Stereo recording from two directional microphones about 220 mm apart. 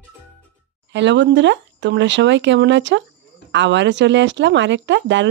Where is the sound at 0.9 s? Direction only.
55° right (ahead or behind).